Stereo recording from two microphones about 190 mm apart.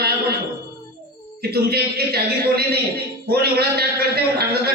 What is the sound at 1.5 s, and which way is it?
A man's voice, 55° right (ahead or behind).